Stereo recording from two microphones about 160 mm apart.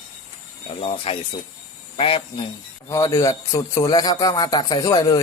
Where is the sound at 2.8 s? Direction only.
20° left (ahead or behind).